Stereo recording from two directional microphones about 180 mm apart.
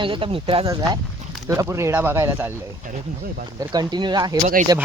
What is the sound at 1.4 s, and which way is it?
Speech, 15° right (ahead or behind).